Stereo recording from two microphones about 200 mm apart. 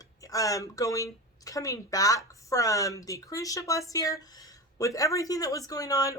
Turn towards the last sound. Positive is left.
turn(degrees=15)  # may be behind; listen again after turning